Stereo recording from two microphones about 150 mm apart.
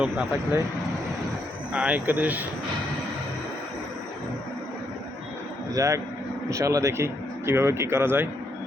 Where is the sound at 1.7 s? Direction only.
10° right (ahead or behind).